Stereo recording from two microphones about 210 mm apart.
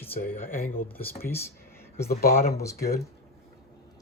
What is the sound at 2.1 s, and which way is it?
Speech, 45° left (ahead or behind).